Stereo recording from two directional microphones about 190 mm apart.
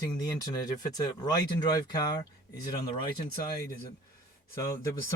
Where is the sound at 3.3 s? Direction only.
15° left (ahead or behind).